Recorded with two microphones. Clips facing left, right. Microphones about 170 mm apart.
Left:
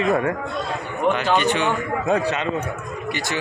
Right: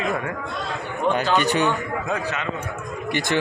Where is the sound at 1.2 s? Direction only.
40° right (ahead or behind).